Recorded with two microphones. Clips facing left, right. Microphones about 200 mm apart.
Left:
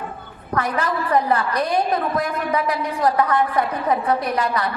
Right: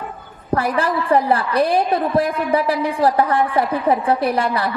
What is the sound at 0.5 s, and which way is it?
A woman's voice, 30° right (ahead or behind).